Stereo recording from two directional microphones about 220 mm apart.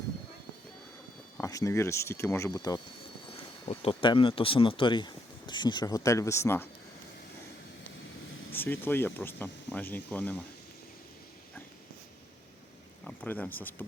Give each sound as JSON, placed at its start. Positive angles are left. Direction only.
{"t": 1.4, "sound": "speech", "side_deg": 15}
{"t": 8.5, "sound": "speech", "side_deg": 10}
{"t": 13.1, "sound": "speech", "side_deg": 5}